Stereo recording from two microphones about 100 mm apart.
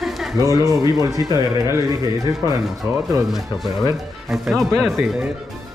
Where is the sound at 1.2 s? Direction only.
35° right (ahead or behind).